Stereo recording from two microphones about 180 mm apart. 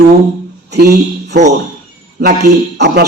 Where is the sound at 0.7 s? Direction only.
60° right (ahead or behind).